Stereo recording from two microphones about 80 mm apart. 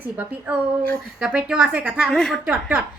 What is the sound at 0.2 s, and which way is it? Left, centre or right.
A woman's voice, centre.